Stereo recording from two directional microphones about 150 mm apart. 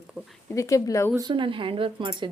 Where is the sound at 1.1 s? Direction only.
30° right (ahead or behind).